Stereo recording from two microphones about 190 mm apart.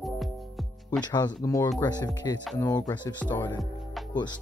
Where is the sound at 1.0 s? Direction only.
20° left (ahead or behind).